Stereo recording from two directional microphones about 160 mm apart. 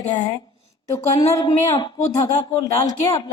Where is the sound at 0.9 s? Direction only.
20° left (ahead or behind).